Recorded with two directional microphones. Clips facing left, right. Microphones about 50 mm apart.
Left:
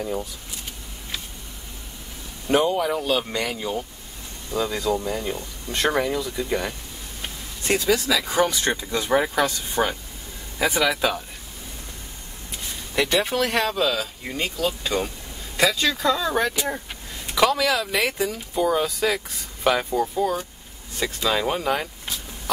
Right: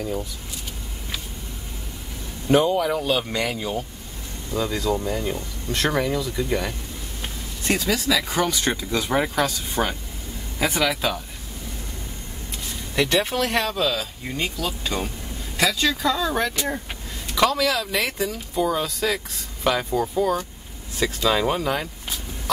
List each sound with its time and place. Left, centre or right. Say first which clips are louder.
2.4 s speech: right 2 dB; centre
4.5 s speech: even; centre
4.9 s speech: right 1 dB; centre
7.2 s vehicle: even; centre
8.9 s speech: left 1 dB; centre
12.9 s speech: even; centre
14.9 s speech: left 2 dB; left
15.5 s speech: left 1 dB; centre